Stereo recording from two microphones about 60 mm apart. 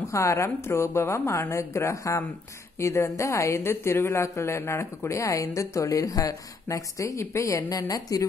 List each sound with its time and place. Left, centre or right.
0.1 s a woman's voice: left